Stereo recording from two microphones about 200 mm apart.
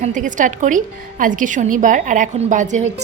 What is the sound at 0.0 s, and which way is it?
A woman's voice, 40° right (ahead or behind).